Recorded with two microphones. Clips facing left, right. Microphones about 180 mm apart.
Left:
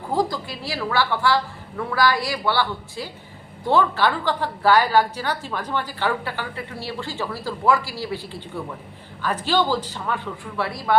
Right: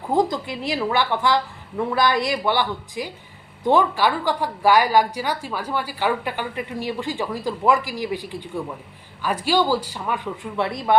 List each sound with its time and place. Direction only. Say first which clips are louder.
0.1 s a woman's voice: right 3 dB; 20° right (ahead or behind)